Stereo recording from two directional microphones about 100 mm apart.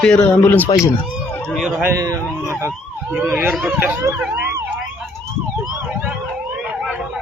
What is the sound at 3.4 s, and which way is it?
Speech, 15° right (ahead or behind).